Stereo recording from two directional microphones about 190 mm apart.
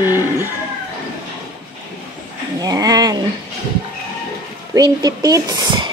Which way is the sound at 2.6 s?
20° right (ahead or behind).